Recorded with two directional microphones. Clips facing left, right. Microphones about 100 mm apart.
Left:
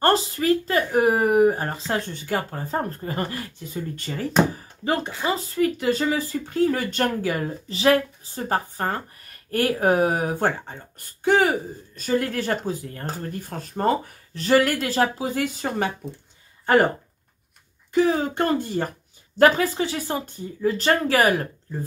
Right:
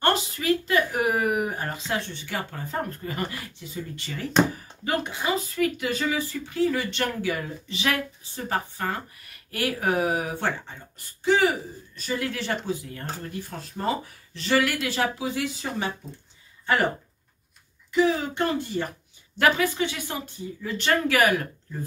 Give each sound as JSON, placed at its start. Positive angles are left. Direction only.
{"t": 0.0, "sound": "a sound", "side_deg": 35}
{"t": 1.9, "sound": "speech", "side_deg": 40}
{"t": 17.9, "sound": "speech", "side_deg": 40}